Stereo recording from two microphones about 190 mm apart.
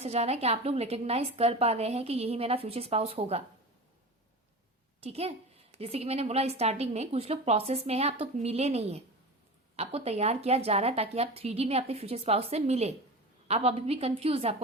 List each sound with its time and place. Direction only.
0.0 s a woman's voice: 35° right (ahead or behind)
4.9 s a woman's voice: 30° right (ahead or behind)